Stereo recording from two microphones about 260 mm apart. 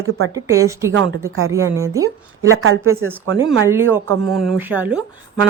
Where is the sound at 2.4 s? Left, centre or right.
Right.